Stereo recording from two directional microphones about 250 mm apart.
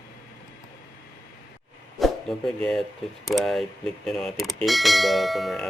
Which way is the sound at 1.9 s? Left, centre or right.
Centre.